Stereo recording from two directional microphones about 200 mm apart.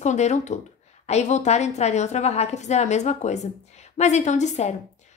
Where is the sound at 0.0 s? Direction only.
35° left (ahead or behind).